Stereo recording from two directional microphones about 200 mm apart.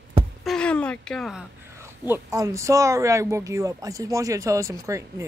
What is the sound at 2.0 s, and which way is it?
Speech, 15° right (ahead or behind).